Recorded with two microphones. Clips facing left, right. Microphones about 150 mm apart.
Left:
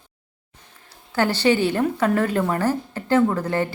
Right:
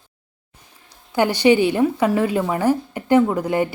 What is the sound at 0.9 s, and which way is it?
A woman's voice, 15° right (ahead or behind).